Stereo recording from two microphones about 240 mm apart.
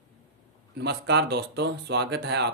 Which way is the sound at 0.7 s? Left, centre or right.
Right.